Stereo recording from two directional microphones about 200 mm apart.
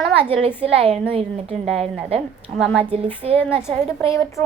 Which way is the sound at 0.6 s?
30° right (ahead or behind).